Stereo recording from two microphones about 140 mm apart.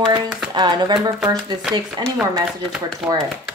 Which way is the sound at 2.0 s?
30° right (ahead or behind).